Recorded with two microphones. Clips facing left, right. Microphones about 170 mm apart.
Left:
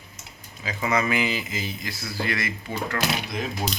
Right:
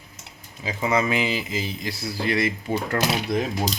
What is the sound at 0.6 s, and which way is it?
Speech, 25° right (ahead or behind).